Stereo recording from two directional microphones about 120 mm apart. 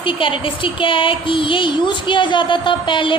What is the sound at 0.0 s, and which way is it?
A woman's voice, 45° left (ahead or behind).